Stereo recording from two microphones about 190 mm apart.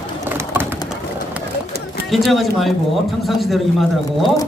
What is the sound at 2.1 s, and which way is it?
Speech, centre (ahead or behind).